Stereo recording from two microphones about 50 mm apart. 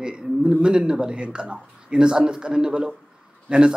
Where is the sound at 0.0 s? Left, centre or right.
Centre.